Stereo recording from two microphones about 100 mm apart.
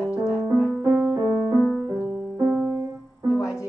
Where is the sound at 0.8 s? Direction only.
20° right (ahead or behind).